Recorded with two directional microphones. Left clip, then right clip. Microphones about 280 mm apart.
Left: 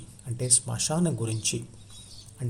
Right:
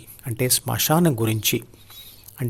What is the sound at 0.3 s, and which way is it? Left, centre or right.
Speech, right.